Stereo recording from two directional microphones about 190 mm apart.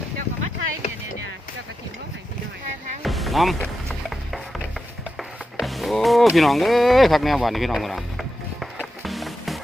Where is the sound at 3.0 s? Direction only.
Centre (ahead or behind).